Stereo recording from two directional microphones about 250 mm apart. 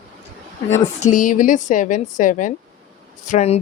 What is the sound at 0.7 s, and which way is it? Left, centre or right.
A woman's voice, left.